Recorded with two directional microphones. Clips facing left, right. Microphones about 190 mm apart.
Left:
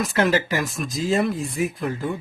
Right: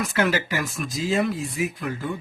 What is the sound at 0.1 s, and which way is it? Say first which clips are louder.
Speech: left 3 dB; 35° left (ahead or behind).